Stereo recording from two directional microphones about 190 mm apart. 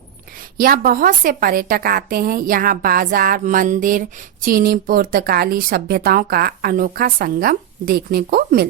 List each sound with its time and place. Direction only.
0.6 s a woman's voice: 50° right (ahead or behind)